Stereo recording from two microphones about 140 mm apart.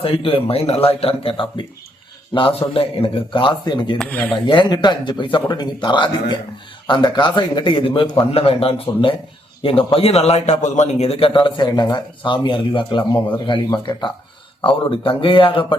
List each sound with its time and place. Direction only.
0.0 s a man's voice: 40° left (ahead or behind)
3.9 s speech: 5° left (ahead or behind)
4.4 s a man's voice: 35° left (ahead or behind)